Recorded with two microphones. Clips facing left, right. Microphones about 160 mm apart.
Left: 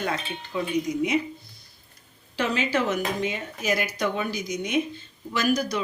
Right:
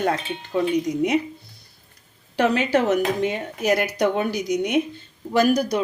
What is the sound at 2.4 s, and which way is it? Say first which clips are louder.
Dishes: right 6 dB; 60° right (ahead or behind).